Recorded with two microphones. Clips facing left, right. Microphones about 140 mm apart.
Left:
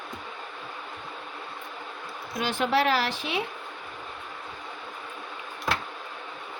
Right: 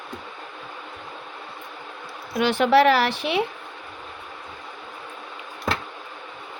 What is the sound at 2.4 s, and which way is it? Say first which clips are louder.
A woman's voice: right 8 dB; 75° right (ahead or behind).